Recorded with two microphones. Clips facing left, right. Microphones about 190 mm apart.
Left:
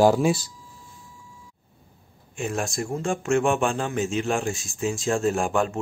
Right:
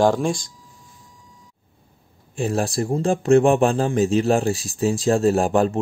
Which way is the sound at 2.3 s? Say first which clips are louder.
Right 6 dB; 35° right (ahead or behind).